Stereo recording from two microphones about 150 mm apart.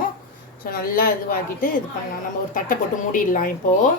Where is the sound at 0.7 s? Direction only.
75° left (ahead or behind).